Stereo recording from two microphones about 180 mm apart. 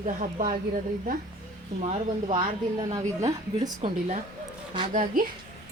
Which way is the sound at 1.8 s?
35° right (ahead or behind).